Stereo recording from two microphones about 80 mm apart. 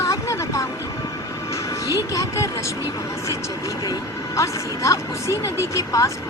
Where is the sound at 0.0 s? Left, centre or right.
Left.